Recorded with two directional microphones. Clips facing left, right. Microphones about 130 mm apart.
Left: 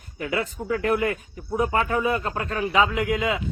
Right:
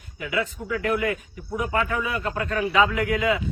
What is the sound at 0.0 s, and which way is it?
Speech, 40° left (ahead or behind).